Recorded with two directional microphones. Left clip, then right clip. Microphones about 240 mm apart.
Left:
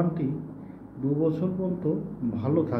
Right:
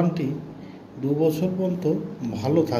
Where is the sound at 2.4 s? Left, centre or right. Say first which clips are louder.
Right 5 dB; centre.